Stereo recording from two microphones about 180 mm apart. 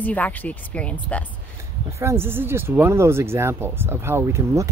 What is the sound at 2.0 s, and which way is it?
Speech, 15° right (ahead or behind).